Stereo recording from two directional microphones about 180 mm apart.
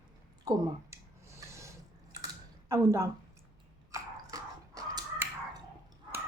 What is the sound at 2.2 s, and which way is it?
Computer keyboard, 15° right (ahead or behind).